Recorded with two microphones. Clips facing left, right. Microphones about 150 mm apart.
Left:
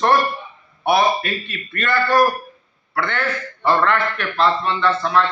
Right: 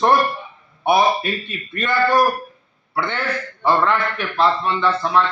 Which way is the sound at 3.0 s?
15° right (ahead or behind).